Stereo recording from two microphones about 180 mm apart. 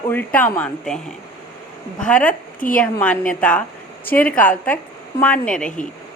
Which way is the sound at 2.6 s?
50° left (ahead or behind).